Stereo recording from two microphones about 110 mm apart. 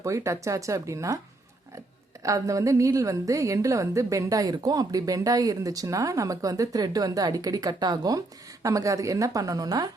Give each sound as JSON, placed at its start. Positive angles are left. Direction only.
{"t": 0.0, "sound": "speech", "side_deg": -30}
{"t": 2.2, "sound": "a woman's voice", "side_deg": -30}